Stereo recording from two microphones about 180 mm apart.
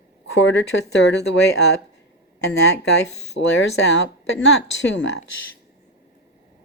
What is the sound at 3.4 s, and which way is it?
A woman's voice, 90° left.